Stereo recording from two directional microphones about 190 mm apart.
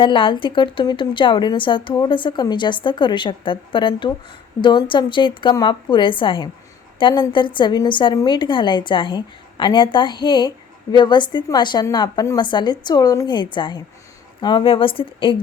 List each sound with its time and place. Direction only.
0.0 s a woman's voice: 25° left (ahead or behind)